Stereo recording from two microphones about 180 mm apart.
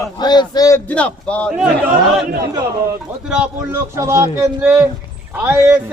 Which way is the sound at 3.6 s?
15° right (ahead or behind).